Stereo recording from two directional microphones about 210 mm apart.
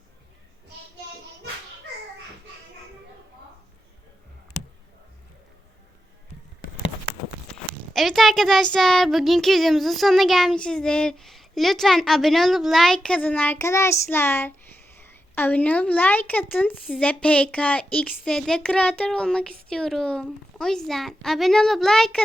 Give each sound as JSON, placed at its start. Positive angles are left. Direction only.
{"t": 7.9, "sound": "a woman's voice", "side_deg": 0}